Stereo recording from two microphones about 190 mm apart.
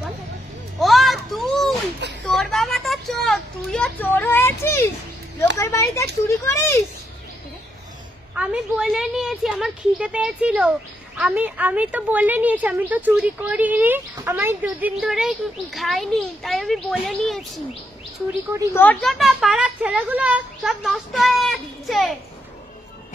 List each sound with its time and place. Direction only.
0.7 s a sound: centre (ahead or behind)
2.2 s speech: 5° left (ahead or behind)
8.4 s speech: 5° right (ahead or behind)
18.7 s speech: 10° left (ahead or behind)